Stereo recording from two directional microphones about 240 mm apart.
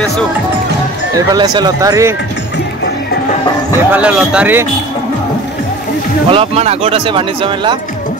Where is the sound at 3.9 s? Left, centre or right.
Centre.